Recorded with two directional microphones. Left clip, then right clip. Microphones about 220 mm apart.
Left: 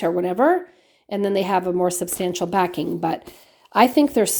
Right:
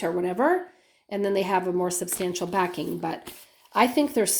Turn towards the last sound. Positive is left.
turn(degrees=50)  # may be behind; listen again after turning